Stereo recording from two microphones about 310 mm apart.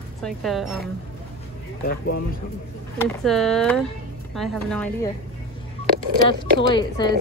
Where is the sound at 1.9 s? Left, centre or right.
Left.